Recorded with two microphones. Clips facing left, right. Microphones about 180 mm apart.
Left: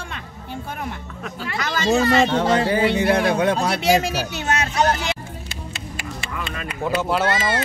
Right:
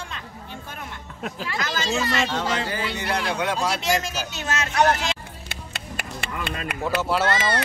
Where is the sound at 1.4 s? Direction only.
55° left (ahead or behind).